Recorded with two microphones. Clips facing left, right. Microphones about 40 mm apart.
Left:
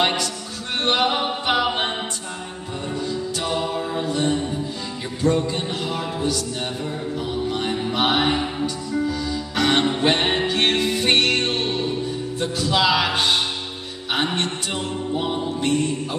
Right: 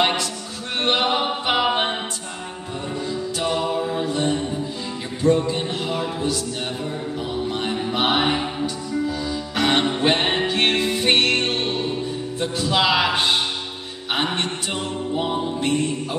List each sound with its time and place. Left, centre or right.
0.0 s music: centre
0.8 s a capella: centre
3.3 s a capella: centre
4.2 s a sound: centre
5.2 s music: centre
7.4 s music: centre
9.8 s music: centre